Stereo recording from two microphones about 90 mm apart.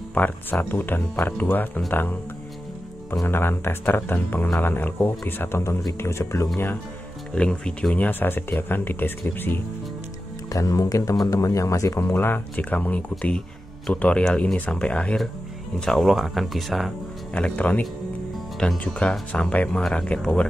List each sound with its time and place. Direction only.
0.1 s speech: 20° left (ahead or behind)
3.3 s speech: 25° left (ahead or behind)
7.3 s speech: 10° left (ahead or behind)
10.5 s speech: 40° left (ahead or behind); by 13.0 s 15° left (ahead or behind)
14.0 s speech: 10° left (ahead or behind)
15.8 s speech: centre (ahead or behind)
17.3 s speech: 15° left (ahead or behind)
18.6 s speech: centre (ahead or behind)
18.9 s speech: 10° left (ahead or behind)